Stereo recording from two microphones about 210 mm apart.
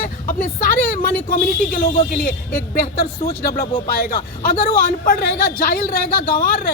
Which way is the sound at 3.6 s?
40° left (ahead or behind).